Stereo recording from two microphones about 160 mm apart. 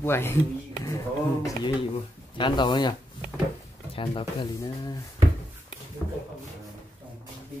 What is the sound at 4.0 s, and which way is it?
Speech, 30° left (ahead or behind).